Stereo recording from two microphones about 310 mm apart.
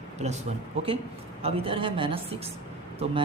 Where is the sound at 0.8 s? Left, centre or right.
Centre.